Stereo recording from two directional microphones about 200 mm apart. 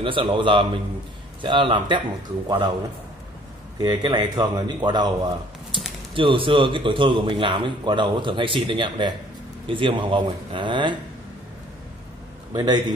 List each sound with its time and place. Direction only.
0.0 s a man's voice: 25° right (ahead or behind)
3.8 s a man's voice: 20° right (ahead or behind)
12.5 s a man's voice: 20° right (ahead or behind)